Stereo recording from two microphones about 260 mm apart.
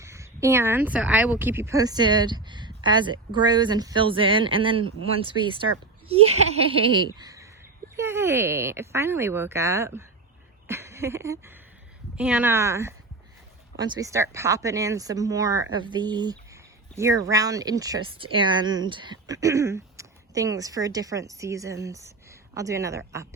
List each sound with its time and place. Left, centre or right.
0.0 s speech: centre
6.7 s speech: centre
10.7 s a sound: centre
12.1 s speech: centre